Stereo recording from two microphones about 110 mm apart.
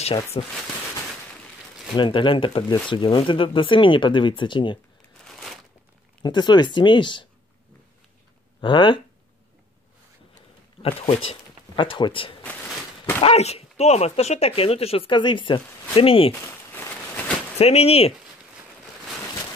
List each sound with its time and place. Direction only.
0.3 s speech: 65° left (ahead or behind)
2.0 s speech: 50° left (ahead or behind)
5.2 s a sound: centre (ahead or behind)
6.2 s speech: 40° left (ahead or behind)
8.5 s speech: 50° left (ahead or behind)
10.8 s speech: 60° left (ahead or behind)
11.7 s speech: 50° left (ahead or behind)
13.2 s speech: 70° left (ahead or behind)
16.4 s a sound: 20° left (ahead or behind)
17.6 s speech: 70° left (ahead or behind)